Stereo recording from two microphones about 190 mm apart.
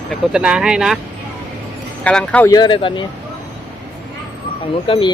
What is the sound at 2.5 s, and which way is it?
Speech, 25° left (ahead or behind).